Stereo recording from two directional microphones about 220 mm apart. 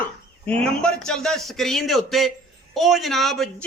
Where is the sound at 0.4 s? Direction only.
5° left (ahead or behind).